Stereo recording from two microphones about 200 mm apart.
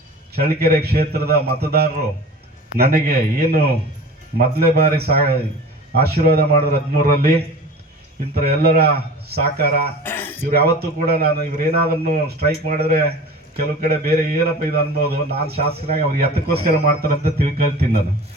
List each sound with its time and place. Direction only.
0.3 s a man's voice: 50° right (ahead or behind)
8.4 s a man's voice: 50° right (ahead or behind)
10.0 s a sound: 10° left (ahead or behind)
10.5 s a man's voice: 50° right (ahead or behind)